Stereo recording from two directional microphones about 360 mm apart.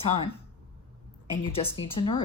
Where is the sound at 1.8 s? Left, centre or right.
Centre.